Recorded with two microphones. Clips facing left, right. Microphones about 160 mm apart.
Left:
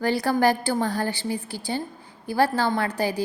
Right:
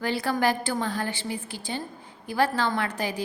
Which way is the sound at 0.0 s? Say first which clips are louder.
Left 4 dB; 40° left (ahead or behind).